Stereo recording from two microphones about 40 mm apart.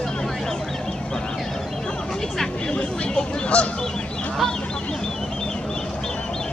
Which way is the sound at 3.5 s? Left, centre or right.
Left.